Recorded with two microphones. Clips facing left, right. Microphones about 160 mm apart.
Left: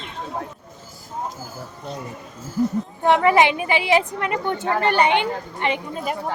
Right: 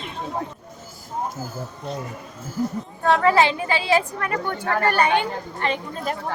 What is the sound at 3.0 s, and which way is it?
A woman's voice, 20° left (ahead or behind).